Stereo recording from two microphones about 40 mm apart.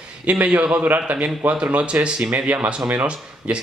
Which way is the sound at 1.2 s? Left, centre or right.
Right.